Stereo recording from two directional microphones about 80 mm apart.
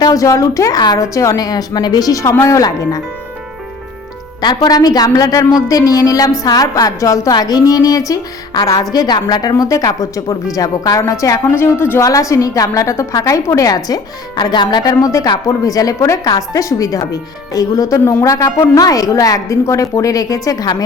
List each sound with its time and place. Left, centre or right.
0.0 s a woman's voice: left
4.4 s a woman's voice: left
7.3 s a woman's voice: left
12.0 s a woman's voice: left